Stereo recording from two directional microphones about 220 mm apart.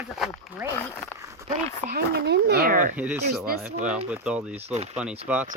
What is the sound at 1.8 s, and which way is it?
Speech, 45° right (ahead or behind).